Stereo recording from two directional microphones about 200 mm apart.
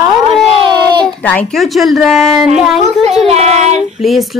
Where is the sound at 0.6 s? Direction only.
20° right (ahead or behind).